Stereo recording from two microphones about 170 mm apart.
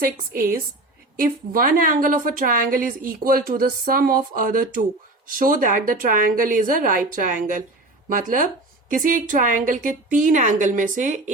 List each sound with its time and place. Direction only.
0.0 s a woman's voice: 60° right (ahead or behind)